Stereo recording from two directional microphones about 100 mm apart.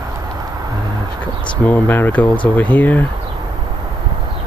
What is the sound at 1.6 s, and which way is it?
Speech, 20° left (ahead or behind).